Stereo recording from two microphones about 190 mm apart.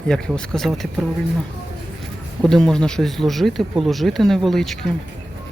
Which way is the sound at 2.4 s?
5° left (ahead or behind).